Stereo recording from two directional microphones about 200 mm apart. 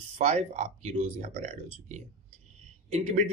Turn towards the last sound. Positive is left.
turn(degrees=-30)  # may be behind; listen again after turning